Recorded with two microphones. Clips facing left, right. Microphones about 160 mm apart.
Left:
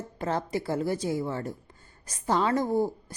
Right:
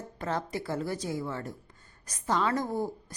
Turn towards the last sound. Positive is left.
turn(degrees=25)  # may be behind; listen again after turning